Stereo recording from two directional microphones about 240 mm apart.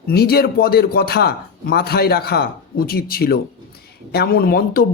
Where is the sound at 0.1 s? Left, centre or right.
Left.